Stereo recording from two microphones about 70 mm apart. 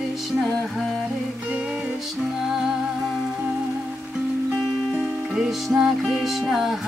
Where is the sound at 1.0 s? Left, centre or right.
Centre.